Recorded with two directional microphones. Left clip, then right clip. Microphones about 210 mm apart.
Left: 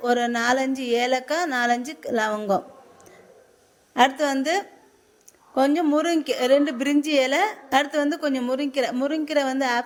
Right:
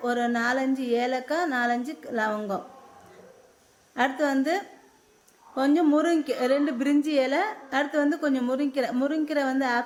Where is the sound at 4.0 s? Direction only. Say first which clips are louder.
Left 5 dB; 35° left (ahead or behind).